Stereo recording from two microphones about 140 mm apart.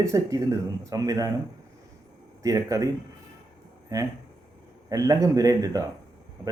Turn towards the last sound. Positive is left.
turn(degrees=-25)  # may be behind; listen again after turning